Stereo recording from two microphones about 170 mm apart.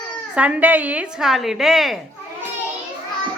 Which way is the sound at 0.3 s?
10° right (ahead or behind).